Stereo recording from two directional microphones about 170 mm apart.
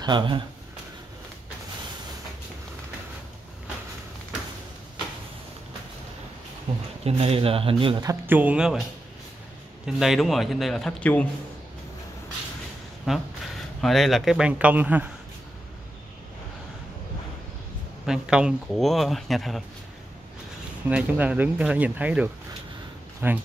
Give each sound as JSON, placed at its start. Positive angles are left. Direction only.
{"t": 0.0, "sound": "speech", "side_deg": -25}
{"t": 6.7, "sound": "speech", "side_deg": -40}
{"t": 9.8, "sound": "speech", "side_deg": 0}
{"t": 13.1, "sound": "speech", "side_deg": -5}
{"t": 18.0, "sound": "speech", "side_deg": -5}
{"t": 20.9, "sound": "speech", "side_deg": -10}